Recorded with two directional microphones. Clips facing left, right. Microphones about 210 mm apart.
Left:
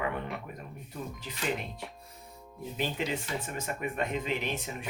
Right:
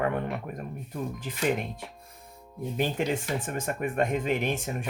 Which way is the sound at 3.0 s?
50° right (ahead or behind).